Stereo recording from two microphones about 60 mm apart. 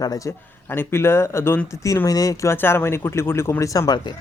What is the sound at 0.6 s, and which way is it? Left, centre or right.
Speech, left.